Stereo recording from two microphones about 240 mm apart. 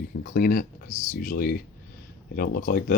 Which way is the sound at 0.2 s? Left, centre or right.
Left.